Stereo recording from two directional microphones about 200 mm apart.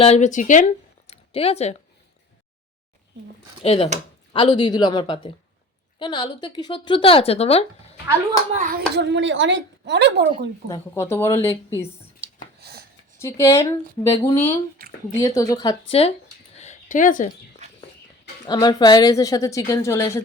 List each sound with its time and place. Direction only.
0.0 s speech: 35° left (ahead or behind)
3.6 s a woman's voice: 30° left (ahead or behind)
8.5 s clapping: 40° right (ahead or behind)
9.0 s a woman's voice: 60° right (ahead or behind)
10.7 s a woman's voice: 15° left (ahead or behind)
12.2 s a sound: 60° right (ahead or behind)
13.1 s a woman's voice: 15° left (ahead or behind)
14.8 s a sound: 45° right (ahead or behind)
15.1 s a woman's voice: 15° left (ahead or behind)
16.6 s a sound: 40° left (ahead or behind)
18.4 s a woman's voice: 20° left (ahead or behind)